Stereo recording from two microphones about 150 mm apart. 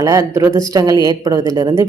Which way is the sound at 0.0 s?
20° right (ahead or behind).